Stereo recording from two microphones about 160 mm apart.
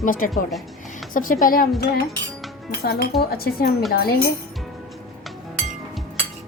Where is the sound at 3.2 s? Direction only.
70° left (ahead or behind).